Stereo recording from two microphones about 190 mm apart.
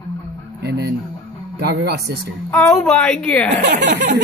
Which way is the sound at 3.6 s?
60° right (ahead or behind).